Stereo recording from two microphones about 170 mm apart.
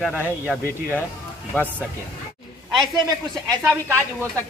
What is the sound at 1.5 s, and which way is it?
Speech, 10° left (ahead or behind).